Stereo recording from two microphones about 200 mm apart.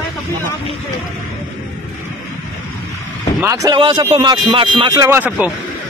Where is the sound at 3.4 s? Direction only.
15° right (ahead or behind).